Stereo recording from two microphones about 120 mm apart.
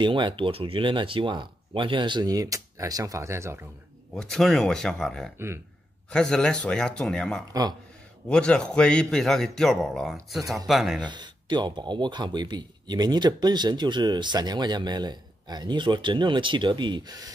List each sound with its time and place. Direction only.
0.0 s speech: 40° right (ahead or behind); by 3.6 s 20° right (ahead or behind)
4.1 s a man's voice: 5° left (ahead or behind)
11.0 s speech: 40° right (ahead or behind)